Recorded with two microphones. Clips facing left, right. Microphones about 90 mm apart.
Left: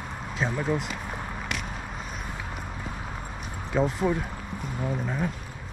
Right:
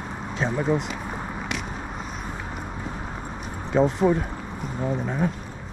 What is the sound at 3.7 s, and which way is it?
Speech, centre (ahead or behind).